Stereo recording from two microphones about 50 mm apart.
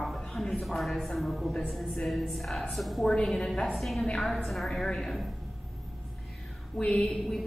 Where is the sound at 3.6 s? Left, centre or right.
Centre.